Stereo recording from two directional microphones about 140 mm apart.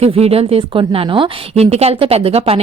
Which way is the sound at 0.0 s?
45° right (ahead or behind).